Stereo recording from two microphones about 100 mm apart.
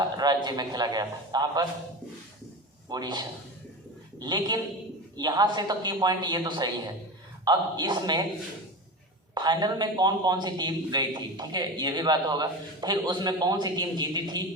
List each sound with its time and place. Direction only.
0.0 s a man's voice: 45° right (ahead or behind)
2.9 s a man's voice: 45° right (ahead or behind)
9.3 s a man's voice: 45° right (ahead or behind)